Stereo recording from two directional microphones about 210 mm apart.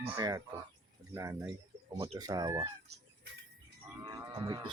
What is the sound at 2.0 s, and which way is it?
Speech, 25° right (ahead or behind).